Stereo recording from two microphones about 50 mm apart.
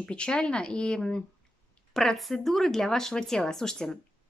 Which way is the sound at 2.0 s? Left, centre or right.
Centre.